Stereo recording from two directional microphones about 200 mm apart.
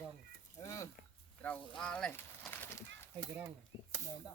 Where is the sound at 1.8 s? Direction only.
5° left (ahead or behind).